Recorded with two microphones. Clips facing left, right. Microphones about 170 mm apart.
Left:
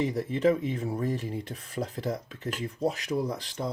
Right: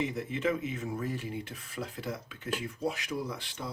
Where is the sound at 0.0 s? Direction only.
35° left (ahead or behind).